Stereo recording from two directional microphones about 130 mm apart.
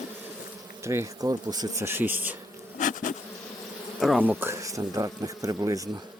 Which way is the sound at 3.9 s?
Centre (ahead or behind).